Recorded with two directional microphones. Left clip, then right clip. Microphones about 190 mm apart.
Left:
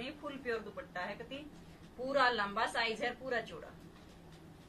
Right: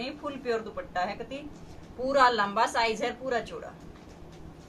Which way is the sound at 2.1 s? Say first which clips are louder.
Right 9 dB; 20° right (ahead or behind).